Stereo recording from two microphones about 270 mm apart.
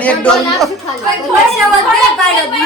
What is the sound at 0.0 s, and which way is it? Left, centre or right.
Speech, centre.